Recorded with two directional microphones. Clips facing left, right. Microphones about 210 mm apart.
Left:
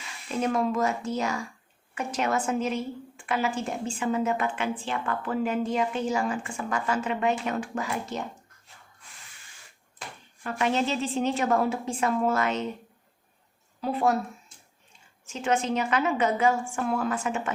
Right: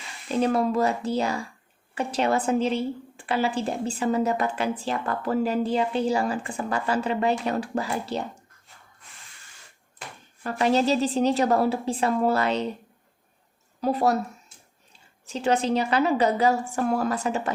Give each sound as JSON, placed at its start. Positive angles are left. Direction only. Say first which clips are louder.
{"t": 0.3, "sound": "a woman's voice", "louder": "right 3 dB", "side_deg": -30}
{"t": 10.4, "sound": "a woman's voice", "louder": "right 4 dB", "side_deg": -35}
{"t": 13.8, "sound": "a woman's voice", "louder": "right 3 dB", "side_deg": -40}
{"t": 15.3, "sound": "a woman's voice", "louder": "right 3 dB", "side_deg": -35}